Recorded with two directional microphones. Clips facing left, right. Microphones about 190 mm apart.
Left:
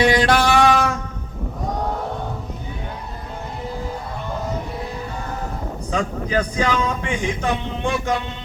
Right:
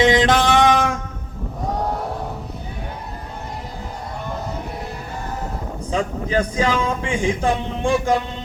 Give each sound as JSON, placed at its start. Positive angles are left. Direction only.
{"t": 0.0, "sound": "mantra", "side_deg": -20}
{"t": 5.9, "sound": "speech", "side_deg": -30}